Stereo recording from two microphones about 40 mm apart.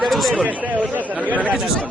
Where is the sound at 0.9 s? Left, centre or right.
Right.